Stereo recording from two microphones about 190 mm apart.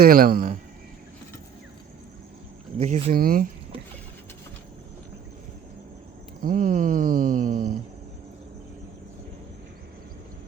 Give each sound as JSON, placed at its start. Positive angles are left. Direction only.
{"t": 0.0, "sound": "speech", "side_deg": -50}
{"t": 2.7, "sound": "speech", "side_deg": -35}
{"t": 6.4, "sound": "speech", "side_deg": -45}